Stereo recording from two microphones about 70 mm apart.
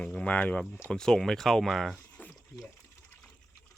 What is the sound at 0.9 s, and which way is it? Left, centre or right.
Speech, centre.